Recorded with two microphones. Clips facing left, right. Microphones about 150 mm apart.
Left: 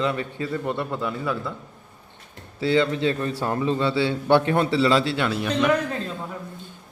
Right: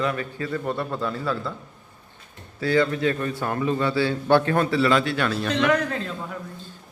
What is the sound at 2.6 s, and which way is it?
A man's voice, 25° left (ahead or behind).